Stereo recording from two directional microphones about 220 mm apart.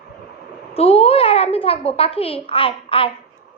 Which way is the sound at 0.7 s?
25° left (ahead or behind).